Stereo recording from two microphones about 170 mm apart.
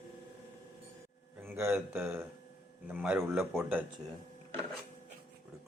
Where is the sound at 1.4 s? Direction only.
10° right (ahead or behind).